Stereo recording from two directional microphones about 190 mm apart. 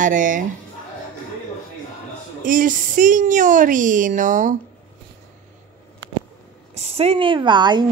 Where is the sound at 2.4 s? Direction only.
45° right (ahead or behind).